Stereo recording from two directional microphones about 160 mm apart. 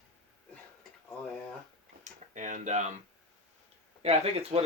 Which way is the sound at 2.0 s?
50° right (ahead or behind).